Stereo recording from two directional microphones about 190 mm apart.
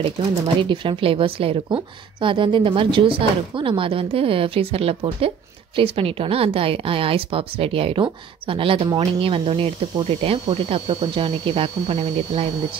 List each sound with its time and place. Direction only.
0.6 s a woman's voice: 25° right (ahead or behind)